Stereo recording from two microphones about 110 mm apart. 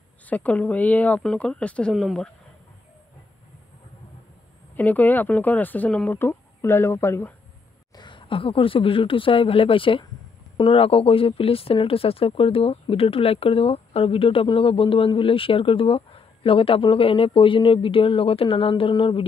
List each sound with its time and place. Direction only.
0.3 s speech: 15° left (ahead or behind)
4.7 s speech: 15° left (ahead or behind)
6.1 s speech: 20° left (ahead or behind)
7.9 s speech: 45° left (ahead or behind)